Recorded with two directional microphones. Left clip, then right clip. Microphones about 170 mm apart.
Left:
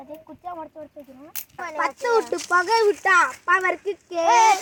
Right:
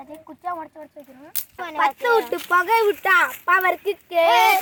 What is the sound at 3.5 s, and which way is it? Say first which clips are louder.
Speech: right 3 dB; 10° right (ahead or behind).